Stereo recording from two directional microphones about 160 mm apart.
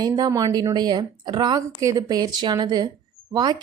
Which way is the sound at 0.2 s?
20° right (ahead or behind).